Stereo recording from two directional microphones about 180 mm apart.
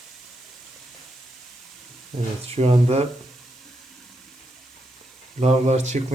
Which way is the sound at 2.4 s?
35° right (ahead or behind).